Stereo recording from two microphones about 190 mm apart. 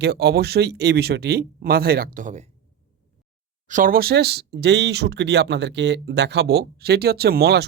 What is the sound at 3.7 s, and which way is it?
Speech, 45° right (ahead or behind).